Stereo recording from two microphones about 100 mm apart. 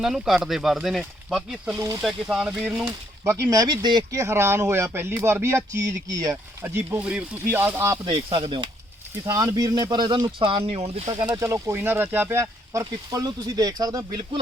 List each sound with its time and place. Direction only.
0.0 s speech: 5° right (ahead or behind)
1.7 s speech: 30° right (ahead or behind)
2.0 s speech: 5° right (ahead or behind)
3.2 s speech: 35° right (ahead or behind)
4.2 s speech: 30° right (ahead or behind)
8.0 s speech: 60° right (ahead or behind)
9.2 s speech: 35° right (ahead or behind)
10.4 s speech: 70° right (ahead or behind); by 11.1 s 90° right
11.1 s speech: 40° right (ahead or behind)
11.4 s speech: 30° right (ahead or behind)